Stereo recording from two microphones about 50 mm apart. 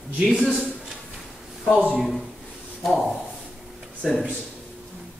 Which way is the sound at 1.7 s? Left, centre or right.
Centre.